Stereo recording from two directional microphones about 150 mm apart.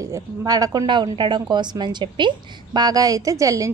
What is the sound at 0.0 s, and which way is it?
Speech, 20° right (ahead or behind).